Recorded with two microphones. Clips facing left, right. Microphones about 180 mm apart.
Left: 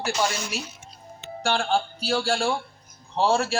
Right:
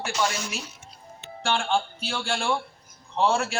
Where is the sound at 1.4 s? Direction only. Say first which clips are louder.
Left 1 dB; 35° left (ahead or behind).